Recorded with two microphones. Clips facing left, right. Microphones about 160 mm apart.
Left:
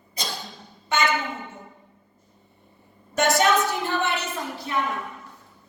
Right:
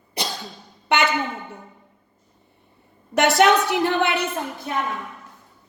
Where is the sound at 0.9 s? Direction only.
70° right (ahead or behind).